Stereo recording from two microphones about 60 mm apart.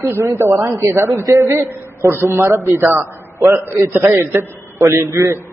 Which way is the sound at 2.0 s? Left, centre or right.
Right.